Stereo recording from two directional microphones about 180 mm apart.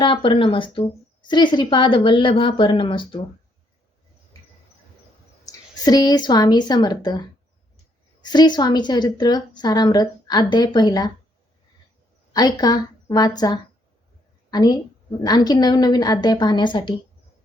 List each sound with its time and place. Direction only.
0.0 s a woman's voice: 30° left (ahead or behind)
5.5 s a woman's voice: 20° left (ahead or behind)
8.2 s a woman's voice: 25° left (ahead or behind)
12.3 s a woman's voice: 20° left (ahead or behind)